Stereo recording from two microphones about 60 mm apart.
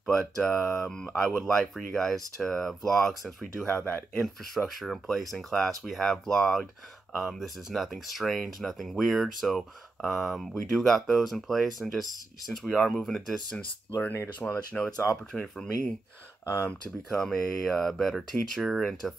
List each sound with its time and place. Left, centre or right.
0.1 s speech: centre
3.6 s speech: left
4.7 s speech: centre
14.4 s speech: left
15.3 s speech: centre
16.4 s speech: left
17.2 s speech: centre